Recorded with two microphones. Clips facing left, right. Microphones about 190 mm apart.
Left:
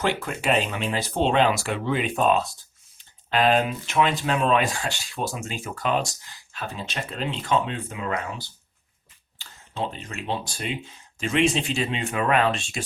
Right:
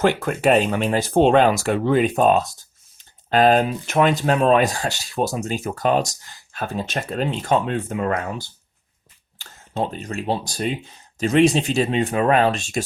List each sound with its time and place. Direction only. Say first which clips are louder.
0.0 s speech: right 7 dB; 50° right (ahead or behind)